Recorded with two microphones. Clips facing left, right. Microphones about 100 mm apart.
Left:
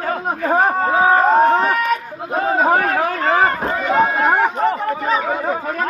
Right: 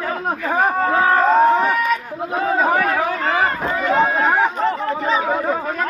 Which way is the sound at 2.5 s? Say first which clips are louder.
Left 2 dB; 40° left (ahead or behind).